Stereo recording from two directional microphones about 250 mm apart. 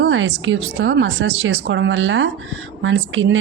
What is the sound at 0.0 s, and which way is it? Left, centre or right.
A woman's voice, right.